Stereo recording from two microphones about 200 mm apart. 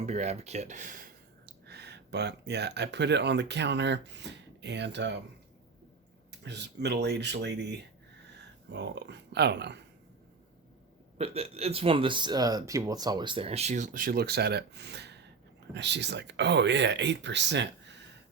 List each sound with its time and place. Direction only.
0.0 s speech: 35° right (ahead or behind)
1.6 s speech: 55° right (ahead or behind)
6.4 s speech: 60° right (ahead or behind)
11.2 s speech: 30° right (ahead or behind); by 17.9 s 60° right (ahead or behind)